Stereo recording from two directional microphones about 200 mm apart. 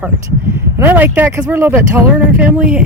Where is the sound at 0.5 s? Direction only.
10° right (ahead or behind).